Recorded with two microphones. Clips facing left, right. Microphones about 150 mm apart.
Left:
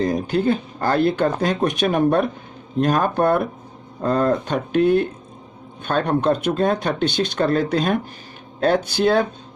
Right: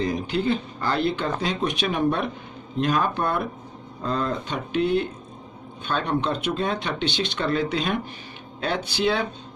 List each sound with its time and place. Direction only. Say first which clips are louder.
0.0 s speech: left 5 dB; 45° left (ahead or behind)